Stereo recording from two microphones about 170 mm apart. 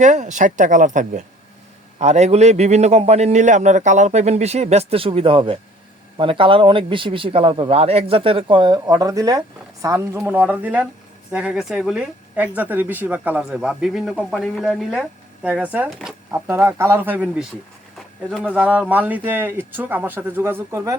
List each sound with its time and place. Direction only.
0.0 s a man's voice: 45° right (ahead or behind); by 17.4 s 10° right (ahead or behind)
18.4 s speech: 10° right (ahead or behind)